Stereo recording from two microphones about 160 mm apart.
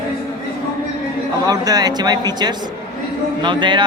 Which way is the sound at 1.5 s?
25° right (ahead or behind).